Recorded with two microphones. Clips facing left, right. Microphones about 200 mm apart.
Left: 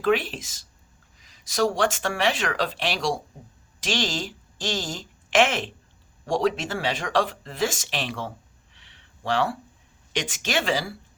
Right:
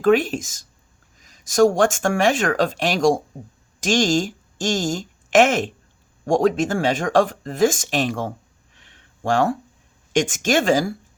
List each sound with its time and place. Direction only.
0.0 s a woman's voice: 45° right (ahead or behind)
8.7 s a sound: 45° right (ahead or behind)
10.1 s speech: 45° right (ahead or behind)